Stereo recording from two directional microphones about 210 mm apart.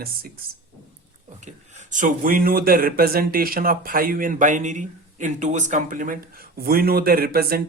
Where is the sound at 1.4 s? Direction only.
35° right (ahead or behind).